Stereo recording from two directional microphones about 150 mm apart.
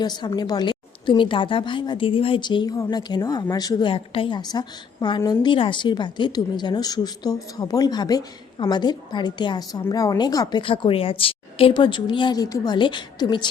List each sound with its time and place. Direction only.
0.0 s a woman's voice: 30° left (ahead or behind)